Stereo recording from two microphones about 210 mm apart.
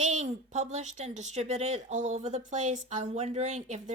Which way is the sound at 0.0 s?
35° right (ahead or behind).